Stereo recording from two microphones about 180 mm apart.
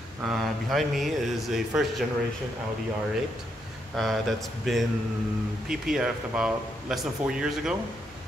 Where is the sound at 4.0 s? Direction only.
Centre (ahead or behind).